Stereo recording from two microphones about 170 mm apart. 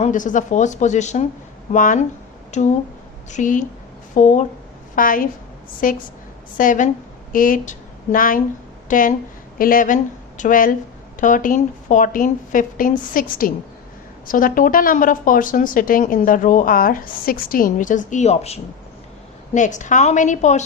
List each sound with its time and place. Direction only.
0.0 s speech: 50° left (ahead or behind)
4.9 s a woman's voice: 55° left (ahead or behind)